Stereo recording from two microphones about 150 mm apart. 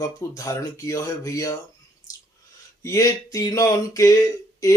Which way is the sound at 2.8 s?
20° left (ahead or behind).